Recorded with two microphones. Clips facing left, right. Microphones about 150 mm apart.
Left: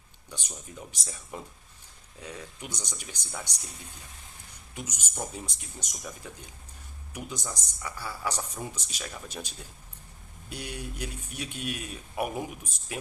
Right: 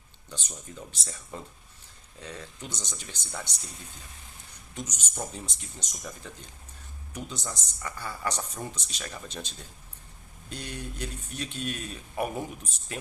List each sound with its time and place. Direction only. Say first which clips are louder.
0.3 s speech: right 1 dB; 10° left (ahead or behind)
4.7 s speech: right 1 dB; 10° left (ahead or behind)